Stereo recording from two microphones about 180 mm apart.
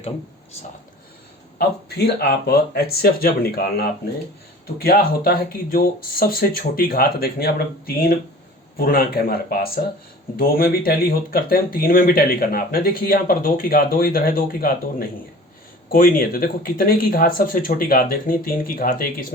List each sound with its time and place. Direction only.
1.5 s speech: 60° left (ahead or behind)